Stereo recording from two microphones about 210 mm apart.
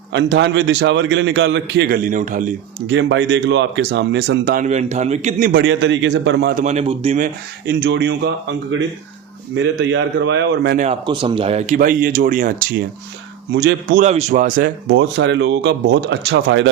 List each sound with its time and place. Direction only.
0.1 s speech: 55° right (ahead or behind); by 2.5 s 35° right (ahead or behind)
2.8 s speech: 60° right (ahead or behind); by 5.5 s 35° right (ahead or behind)
5.5 s speech: 55° right (ahead or behind)
6.5 s speech: 35° right (ahead or behind)
7.7 s speech: 50° right (ahead or behind)
9.6 s speech: 60° right (ahead or behind)
11.0 s speech: 20° right (ahead or behind); by 12.6 s 40° right (ahead or behind)
13.5 s speech: 50° right (ahead or behind)
14.0 s speech: 30° right (ahead or behind)
14.8 s speech: 60° right (ahead or behind)